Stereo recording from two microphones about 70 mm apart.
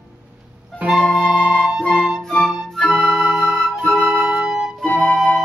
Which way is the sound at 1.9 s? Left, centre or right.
Centre.